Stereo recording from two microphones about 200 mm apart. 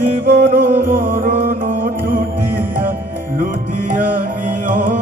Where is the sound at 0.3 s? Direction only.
45° right (ahead or behind).